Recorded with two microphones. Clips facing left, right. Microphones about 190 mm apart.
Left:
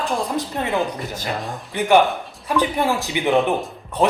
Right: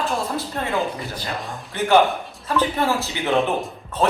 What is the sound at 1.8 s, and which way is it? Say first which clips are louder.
Speech: left 1 dB; 15° left (ahead or behind).